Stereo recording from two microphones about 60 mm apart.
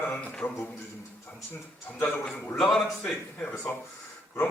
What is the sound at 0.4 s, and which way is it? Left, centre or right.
Speech, left.